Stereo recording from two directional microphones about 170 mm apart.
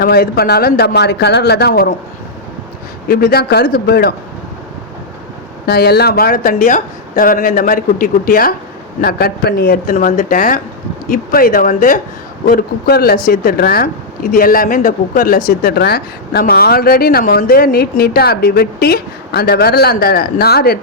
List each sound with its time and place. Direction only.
0.0 s speech: 65° left (ahead or behind)
3.1 s a woman's voice: 60° left (ahead or behind)
5.6 s a woman's voice: 70° left (ahead or behind); by 11.9 s 50° left (ahead or behind)
12.5 s a woman's voice: 65° left (ahead or behind)
15.4 s a woman's voice: 65° left (ahead or behind)